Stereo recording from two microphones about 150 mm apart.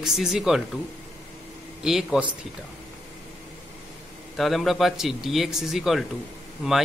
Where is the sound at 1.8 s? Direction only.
Centre (ahead or behind).